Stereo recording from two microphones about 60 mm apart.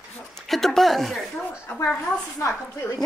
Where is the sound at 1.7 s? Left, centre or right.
Left.